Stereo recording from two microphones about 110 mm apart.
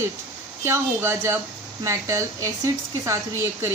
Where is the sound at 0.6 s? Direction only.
25° right (ahead or behind).